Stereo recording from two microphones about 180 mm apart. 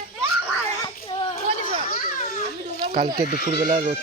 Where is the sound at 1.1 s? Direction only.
30° left (ahead or behind).